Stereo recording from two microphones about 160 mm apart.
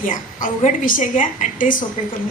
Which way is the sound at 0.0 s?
55° left (ahead or behind).